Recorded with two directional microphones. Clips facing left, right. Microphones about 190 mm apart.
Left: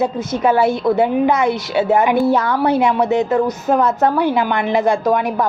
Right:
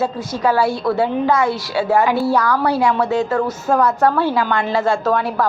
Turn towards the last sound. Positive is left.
turn(degrees=15)  # may be behind; listen again after turning